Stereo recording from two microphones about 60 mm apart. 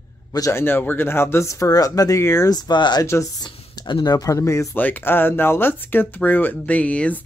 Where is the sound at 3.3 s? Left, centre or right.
Left.